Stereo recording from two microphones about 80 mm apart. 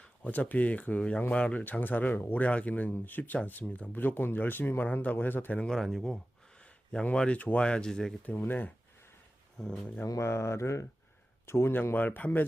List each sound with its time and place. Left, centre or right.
0.0 s speech: centre
5.6 s speech: centre
8.2 s speech: left
9.6 s speech: centre
10.1 s speech: left